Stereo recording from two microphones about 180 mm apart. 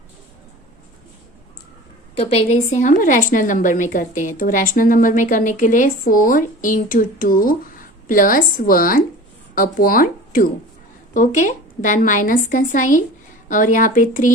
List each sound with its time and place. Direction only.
2.1 s a woman's voice: 35° left (ahead or behind)